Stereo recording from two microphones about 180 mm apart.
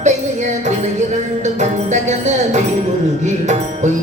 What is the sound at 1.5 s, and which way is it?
Music, 40° right (ahead or behind).